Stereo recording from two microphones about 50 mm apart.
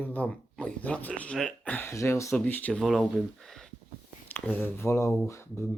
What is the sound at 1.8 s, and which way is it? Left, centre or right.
Speech, left.